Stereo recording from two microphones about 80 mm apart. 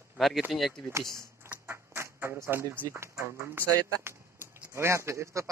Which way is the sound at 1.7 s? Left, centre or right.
Right.